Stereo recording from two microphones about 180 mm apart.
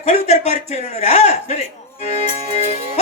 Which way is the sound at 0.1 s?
35° left (ahead or behind).